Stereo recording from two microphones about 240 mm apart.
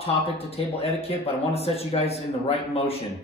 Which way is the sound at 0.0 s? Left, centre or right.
Left.